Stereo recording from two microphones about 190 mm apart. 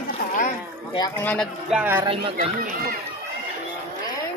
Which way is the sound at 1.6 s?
5° right (ahead or behind).